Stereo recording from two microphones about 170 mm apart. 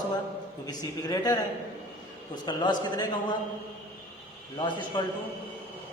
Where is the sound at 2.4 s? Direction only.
25° left (ahead or behind).